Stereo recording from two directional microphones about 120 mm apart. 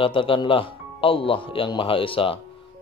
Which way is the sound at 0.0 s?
45° left (ahead or behind).